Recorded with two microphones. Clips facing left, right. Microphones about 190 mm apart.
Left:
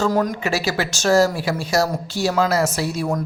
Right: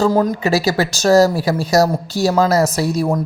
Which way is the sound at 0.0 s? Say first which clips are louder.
Right 5 dB; 30° right (ahead or behind).